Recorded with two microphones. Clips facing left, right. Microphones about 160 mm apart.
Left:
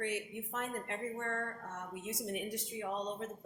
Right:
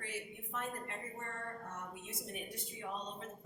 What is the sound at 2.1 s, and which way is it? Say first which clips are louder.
Speech: left 11 dB; 90° left.